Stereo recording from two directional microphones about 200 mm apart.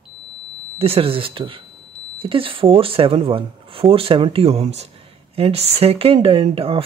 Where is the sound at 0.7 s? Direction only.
30° right (ahead or behind).